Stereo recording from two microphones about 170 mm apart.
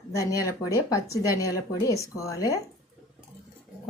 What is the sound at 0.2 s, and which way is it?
A woman's voice, 20° left (ahead or behind).